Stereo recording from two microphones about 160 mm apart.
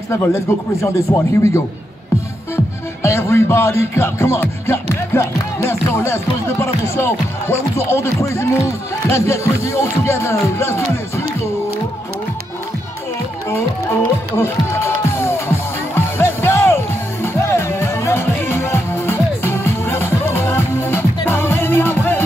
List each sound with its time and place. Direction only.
0.1 s a man's voice: 15° left (ahead or behind)
2.5 s music: 15° left (ahead or behind)
14.3 s music: 15° left (ahead or behind)